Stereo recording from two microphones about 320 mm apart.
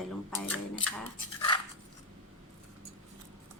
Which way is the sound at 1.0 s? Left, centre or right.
Centre.